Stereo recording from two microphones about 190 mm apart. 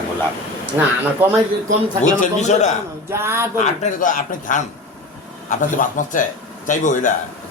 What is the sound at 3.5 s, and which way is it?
Speech, 40° left (ahead or behind).